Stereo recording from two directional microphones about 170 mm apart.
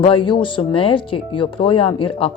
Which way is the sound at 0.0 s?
30° left (ahead or behind).